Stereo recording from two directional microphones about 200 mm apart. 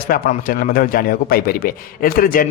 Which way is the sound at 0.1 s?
45° left (ahead or behind).